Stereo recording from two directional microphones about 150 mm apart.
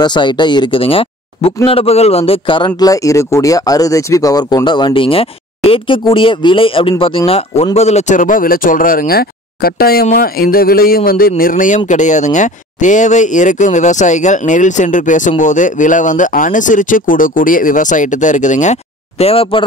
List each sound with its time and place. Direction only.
0.0 s speech: 30° left (ahead or behind)